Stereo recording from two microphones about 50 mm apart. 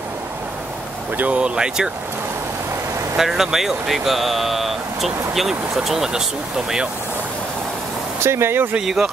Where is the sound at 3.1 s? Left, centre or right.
Centre.